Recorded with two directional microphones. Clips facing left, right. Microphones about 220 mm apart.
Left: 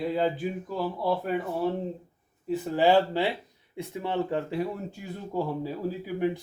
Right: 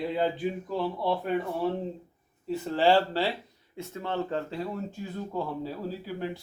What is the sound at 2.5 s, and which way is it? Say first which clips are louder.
Speech: left 1 dB; 15° left (ahead or behind).